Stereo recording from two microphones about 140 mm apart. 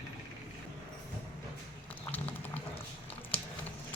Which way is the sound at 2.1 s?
10° left (ahead or behind).